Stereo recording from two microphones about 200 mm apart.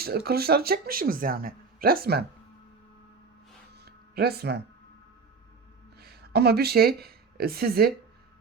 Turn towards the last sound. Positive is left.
turn(degrees=-50)  # may be behind; listen again after turning